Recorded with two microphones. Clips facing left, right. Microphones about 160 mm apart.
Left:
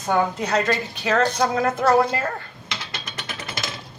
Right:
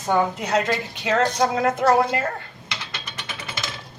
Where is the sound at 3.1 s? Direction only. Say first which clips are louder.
Left 1 dB; 45° left (ahead or behind).